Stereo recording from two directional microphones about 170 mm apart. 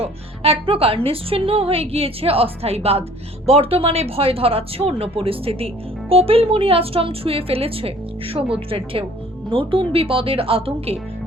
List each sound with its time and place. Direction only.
0.0 s speech: 35° right (ahead or behind)